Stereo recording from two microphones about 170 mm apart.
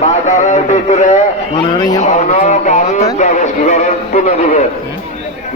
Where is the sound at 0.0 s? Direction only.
45° left (ahead or behind).